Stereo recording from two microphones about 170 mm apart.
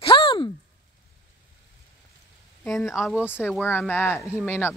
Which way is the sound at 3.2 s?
15° left (ahead or behind).